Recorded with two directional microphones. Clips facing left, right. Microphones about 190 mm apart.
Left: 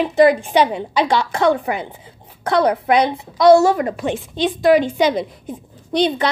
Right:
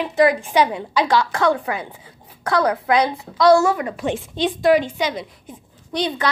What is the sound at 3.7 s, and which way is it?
Speech, 40° left (ahead or behind).